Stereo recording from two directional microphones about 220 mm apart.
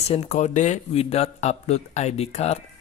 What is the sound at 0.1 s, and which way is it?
Speech, 30° left (ahead or behind).